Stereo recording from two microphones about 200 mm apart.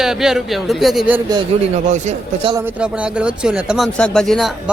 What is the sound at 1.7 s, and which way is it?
Speech, 35° right (ahead or behind).